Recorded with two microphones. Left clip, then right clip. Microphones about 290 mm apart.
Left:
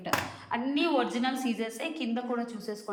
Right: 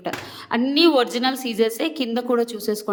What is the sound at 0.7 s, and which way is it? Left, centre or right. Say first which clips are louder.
A woman's voice: right 11 dB; centre.